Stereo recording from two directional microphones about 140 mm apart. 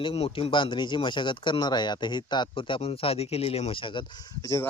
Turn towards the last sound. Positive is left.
turn(degrees=20)  # may be behind; listen again after turning